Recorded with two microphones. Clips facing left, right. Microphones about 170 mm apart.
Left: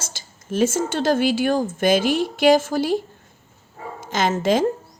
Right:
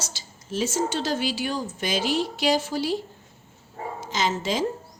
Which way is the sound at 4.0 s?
50° left (ahead or behind).